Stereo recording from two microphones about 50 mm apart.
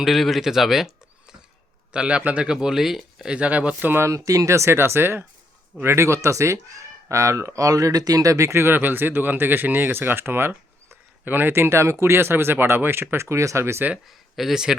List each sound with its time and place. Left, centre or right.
0.0 s speech: centre
1.9 s a man's voice: right
2.5 s speech: centre
3.2 s a man's voice: right
3.8 s speech: right
4.0 s speech: right
4.7 s speech: right
5.8 s speech: right
8.5 s speech: right
14.3 s speech: centre